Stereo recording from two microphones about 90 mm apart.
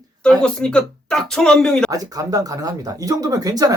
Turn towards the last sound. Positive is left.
turn(degrees=-45)  # may be behind; listen again after turning